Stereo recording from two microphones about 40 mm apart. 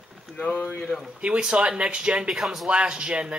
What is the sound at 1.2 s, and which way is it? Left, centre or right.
A man's voice, right.